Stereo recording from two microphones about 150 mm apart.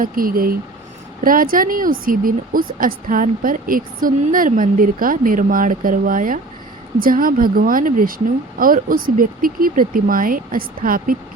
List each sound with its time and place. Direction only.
0.0 s speech: 70° right (ahead or behind)